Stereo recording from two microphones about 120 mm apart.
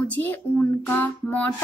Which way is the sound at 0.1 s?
15° left (ahead or behind).